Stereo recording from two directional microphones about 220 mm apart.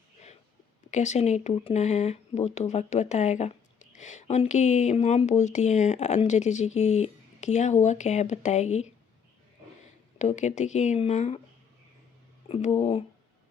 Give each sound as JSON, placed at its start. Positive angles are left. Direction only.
{"t": 0.9, "sound": "speech", "side_deg": 30}
{"t": 10.2, "sound": "speech", "side_deg": 30}
{"t": 12.5, "sound": "speech", "side_deg": 30}